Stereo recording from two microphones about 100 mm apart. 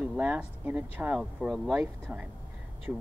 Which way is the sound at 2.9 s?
15° right (ahead or behind).